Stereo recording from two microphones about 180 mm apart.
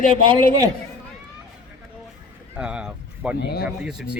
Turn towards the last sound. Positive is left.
turn(degrees=-5)  # may be behind; listen again after turning